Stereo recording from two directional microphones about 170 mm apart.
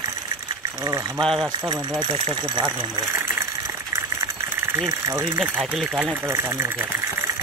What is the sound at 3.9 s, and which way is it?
Engine, 15° right (ahead or behind).